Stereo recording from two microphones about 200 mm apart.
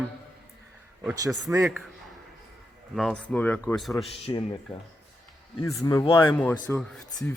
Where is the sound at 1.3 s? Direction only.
Centre (ahead or behind).